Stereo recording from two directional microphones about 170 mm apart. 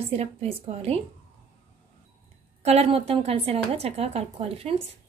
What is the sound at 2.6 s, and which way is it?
A woman's voice, 35° right (ahead or behind).